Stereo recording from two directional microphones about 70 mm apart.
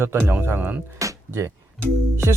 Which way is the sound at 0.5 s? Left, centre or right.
Right.